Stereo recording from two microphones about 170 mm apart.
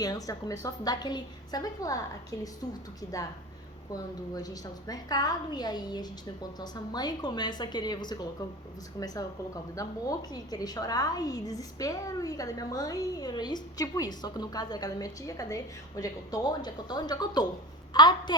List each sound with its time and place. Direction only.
0.0 s a woman's voice: 20° left (ahead or behind)
3.0 s a woman's voice: 20° left (ahead or behind)